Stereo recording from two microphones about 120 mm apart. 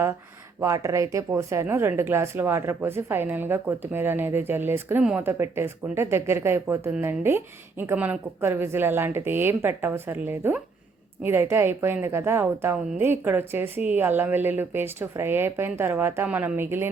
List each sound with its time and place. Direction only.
0.6 s a woman's voice: 25° right (ahead or behind)